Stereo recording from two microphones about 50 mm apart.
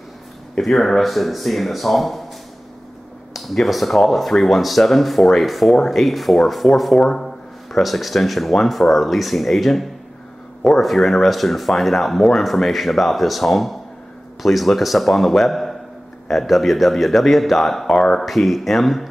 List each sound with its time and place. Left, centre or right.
0.6 s speech: centre
3.3 s speech: centre
18.2 s speech: centre